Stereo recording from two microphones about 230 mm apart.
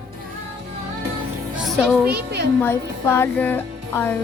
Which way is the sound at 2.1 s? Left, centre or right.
Right.